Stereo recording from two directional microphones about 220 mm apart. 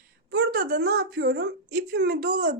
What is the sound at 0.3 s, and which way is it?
A woman's voice, 45° right (ahead or behind).